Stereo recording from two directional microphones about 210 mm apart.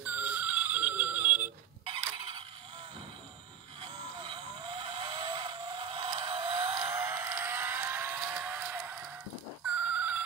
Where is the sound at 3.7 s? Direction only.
25° right (ahead or behind).